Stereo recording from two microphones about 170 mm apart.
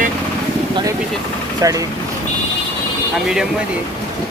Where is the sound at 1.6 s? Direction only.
20° right (ahead or behind).